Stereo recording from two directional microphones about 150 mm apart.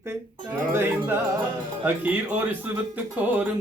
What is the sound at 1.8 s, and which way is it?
Music, 10° right (ahead or behind).